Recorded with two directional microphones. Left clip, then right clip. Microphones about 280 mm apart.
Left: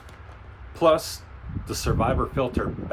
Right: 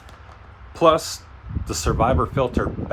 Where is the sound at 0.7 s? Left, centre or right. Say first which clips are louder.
Right 3 dB; right.